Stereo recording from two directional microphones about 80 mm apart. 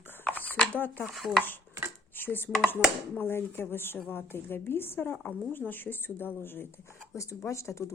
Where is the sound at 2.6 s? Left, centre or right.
Left.